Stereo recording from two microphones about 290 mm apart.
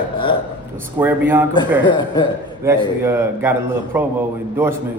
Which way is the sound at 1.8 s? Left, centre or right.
Centre.